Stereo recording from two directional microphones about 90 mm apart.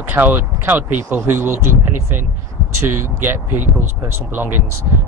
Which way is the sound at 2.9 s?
25° right (ahead or behind).